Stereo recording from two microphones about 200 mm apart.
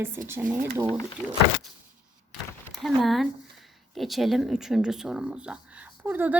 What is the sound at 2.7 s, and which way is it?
Speech, centre (ahead or behind).